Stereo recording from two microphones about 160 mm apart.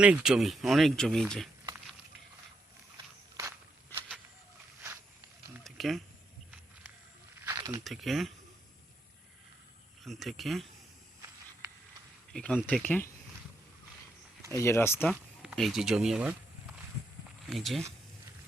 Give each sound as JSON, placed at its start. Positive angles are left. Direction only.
{"t": 0.0, "sound": "speech", "side_deg": -5}
{"t": 5.6, "sound": "a sound", "side_deg": 0}
{"t": 7.4, "sound": "a sound", "side_deg": -20}
{"t": 7.9, "sound": "speech", "side_deg": 0}
{"t": 10.0, "sound": "speech", "side_deg": 0}
{"t": 11.6, "sound": "a sound", "side_deg": -15}
{"t": 12.3, "sound": "speech", "side_deg": 5}
{"t": 14.5, "sound": "speech", "side_deg": 15}
{"t": 15.1, "sound": "speech", "side_deg": -5}
{"t": 17.5, "sound": "speech", "side_deg": 0}